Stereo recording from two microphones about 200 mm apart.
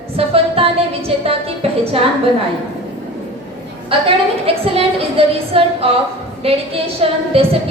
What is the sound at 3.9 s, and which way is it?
A woman's voice, 25° right (ahead or behind).